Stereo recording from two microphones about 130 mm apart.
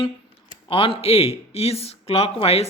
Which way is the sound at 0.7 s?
45° left (ahead or behind).